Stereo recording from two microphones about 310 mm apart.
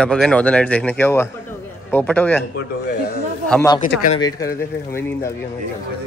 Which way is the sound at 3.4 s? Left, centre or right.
Centre.